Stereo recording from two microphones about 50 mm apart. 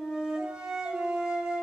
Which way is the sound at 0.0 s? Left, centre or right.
Centre.